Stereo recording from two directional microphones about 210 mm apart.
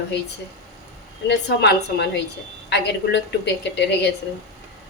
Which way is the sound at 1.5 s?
50° left (ahead or behind).